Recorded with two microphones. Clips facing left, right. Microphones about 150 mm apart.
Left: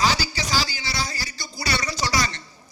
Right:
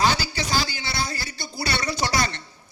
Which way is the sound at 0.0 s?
55° right (ahead or behind).